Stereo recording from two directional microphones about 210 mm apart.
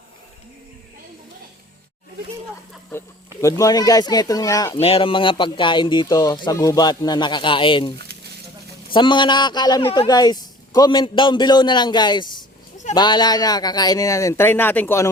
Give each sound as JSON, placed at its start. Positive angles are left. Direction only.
{"t": 3.4, "sound": "speech", "side_deg": 15}
{"t": 7.9, "sound": "a sound", "side_deg": -50}
{"t": 8.9, "sound": "speech", "side_deg": 20}